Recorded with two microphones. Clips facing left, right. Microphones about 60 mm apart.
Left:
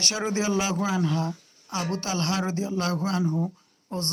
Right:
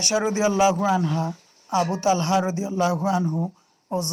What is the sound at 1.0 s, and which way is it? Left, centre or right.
Speech, right.